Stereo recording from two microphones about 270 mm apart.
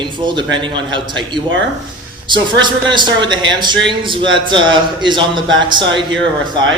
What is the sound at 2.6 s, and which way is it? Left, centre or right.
A man's voice, centre.